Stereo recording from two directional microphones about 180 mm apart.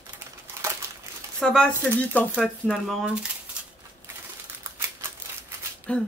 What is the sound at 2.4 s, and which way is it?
Speech, centre (ahead or behind).